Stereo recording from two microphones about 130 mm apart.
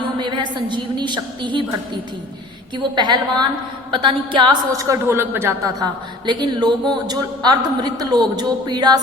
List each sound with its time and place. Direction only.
0.2 s a woman's voice: 35° right (ahead or behind)
2.7 s a woman's voice: 35° right (ahead or behind)
4.9 s a man's voice: 20° right (ahead or behind)
5.8 s a woman's voice: 35° right (ahead or behind)